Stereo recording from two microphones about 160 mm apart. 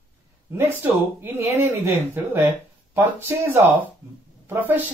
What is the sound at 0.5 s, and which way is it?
Speech, 15° right (ahead or behind).